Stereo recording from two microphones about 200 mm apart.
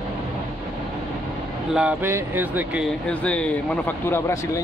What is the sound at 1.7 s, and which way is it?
Speech, 5° right (ahead or behind).